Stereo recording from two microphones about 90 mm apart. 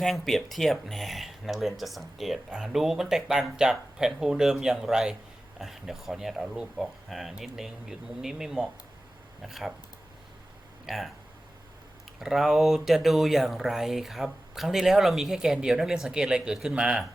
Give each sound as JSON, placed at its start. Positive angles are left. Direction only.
{"t": 0.0, "sound": "speech", "side_deg": 0}
{"t": 10.8, "sound": "speech", "side_deg": 0}
{"t": 12.2, "sound": "speech", "side_deg": -5}